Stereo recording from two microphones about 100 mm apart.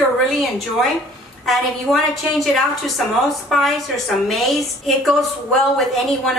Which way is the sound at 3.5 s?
5° left (ahead or behind).